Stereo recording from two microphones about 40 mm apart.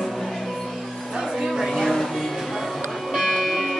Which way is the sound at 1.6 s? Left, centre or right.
Centre.